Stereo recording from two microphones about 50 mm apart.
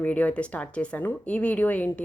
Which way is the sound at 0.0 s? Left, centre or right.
Left.